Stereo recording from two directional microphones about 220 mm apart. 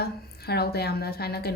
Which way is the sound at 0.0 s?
45° left (ahead or behind).